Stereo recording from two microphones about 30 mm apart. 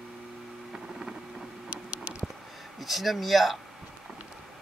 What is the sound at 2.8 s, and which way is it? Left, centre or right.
Speech, centre.